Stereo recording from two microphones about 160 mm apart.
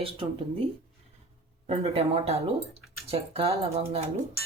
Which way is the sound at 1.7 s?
40° right (ahead or behind).